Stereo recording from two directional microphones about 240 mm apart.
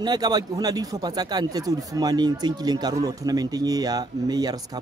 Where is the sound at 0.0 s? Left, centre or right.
Centre.